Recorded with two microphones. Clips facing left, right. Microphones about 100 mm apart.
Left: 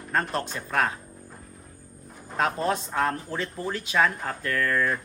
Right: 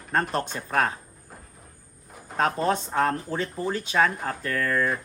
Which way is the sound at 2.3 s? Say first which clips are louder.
Right 2 dB; 35° right (ahead or behind).